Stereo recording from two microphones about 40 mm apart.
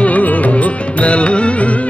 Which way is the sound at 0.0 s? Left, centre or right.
Left.